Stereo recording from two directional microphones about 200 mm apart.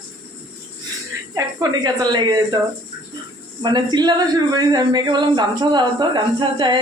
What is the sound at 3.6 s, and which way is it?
Speech, 20° right (ahead or behind).